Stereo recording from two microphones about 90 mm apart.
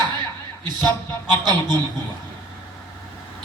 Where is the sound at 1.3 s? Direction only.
50° right (ahead or behind).